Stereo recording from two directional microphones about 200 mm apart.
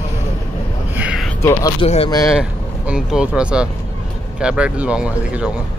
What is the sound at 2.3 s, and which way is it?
Speech, 5° right (ahead or behind).